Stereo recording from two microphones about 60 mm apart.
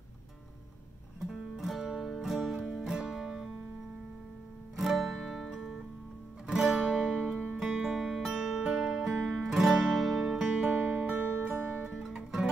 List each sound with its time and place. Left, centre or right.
1.2 s music: centre
4.7 s music: centre
5.5 s music: centre
9.4 s music: centre
10.2 s music: centre
10.7 s music: right
11.4 s music: right
12.0 s music: centre